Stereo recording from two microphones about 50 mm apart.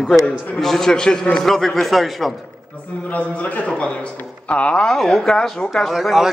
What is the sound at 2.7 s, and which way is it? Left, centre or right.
A man's voice, left.